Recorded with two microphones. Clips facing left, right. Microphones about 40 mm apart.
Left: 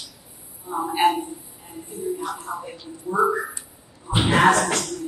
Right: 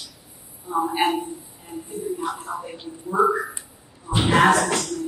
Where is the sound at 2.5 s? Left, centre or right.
Right.